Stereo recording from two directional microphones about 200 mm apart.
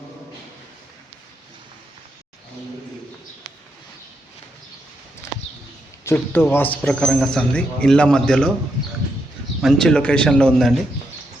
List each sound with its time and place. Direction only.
6.1 s a man's voice: 10° left (ahead or behind)
9.6 s a man's voice: centre (ahead or behind)